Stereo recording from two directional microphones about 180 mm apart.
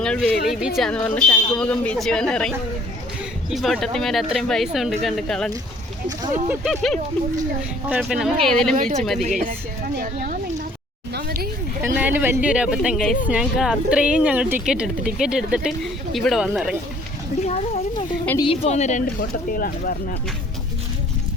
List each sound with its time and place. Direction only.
0.0 s speech: 5° left (ahead or behind)
3.5 s speech: centre (ahead or behind)
6.1 s speech: 10° right (ahead or behind)
6.7 s speech: centre (ahead or behind)
11.1 s a sound: 60° right (ahead or behind)
12.0 s speech: 10° right (ahead or behind)
17.4 s a sound: 35° left (ahead or behind)
18.3 s speech: 30° left (ahead or behind); by 20.0 s 55° left (ahead or behind)